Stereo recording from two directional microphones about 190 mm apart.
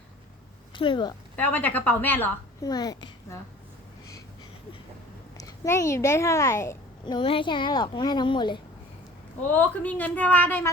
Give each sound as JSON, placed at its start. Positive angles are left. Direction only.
{"t": 0.7, "sound": "speech", "side_deg": 25}
{"t": 1.4, "sound": "a woman's voice", "side_deg": 10}
{"t": 5.4, "sound": "a woman's voice", "side_deg": 15}
{"t": 9.5, "sound": "a woman's voice", "side_deg": 5}